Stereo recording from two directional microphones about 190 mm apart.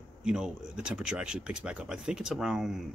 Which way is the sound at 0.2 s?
5° right (ahead or behind).